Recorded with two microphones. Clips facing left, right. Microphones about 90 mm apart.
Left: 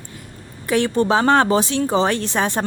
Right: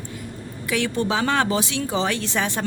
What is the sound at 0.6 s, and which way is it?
A woman's voice, 40° left (ahead or behind).